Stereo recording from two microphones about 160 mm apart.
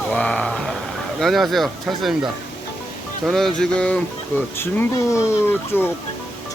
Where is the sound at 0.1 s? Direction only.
5° left (ahead or behind).